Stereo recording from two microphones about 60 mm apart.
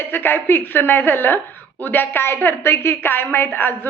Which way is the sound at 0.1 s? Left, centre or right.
Left.